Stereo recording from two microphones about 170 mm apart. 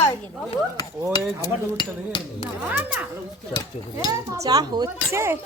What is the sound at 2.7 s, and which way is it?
Speech, 10° right (ahead or behind).